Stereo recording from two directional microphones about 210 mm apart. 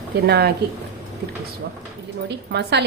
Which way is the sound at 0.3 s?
50° right (ahead or behind).